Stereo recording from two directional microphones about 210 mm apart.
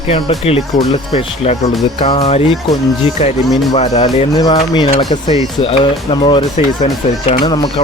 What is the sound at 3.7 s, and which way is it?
Speech, 30° left (ahead or behind).